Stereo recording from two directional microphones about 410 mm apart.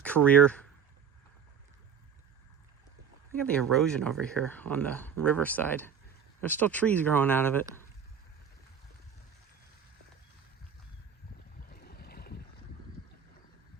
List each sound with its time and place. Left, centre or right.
0.0 s speech: centre
3.4 s speech: centre
11.7 s boat: left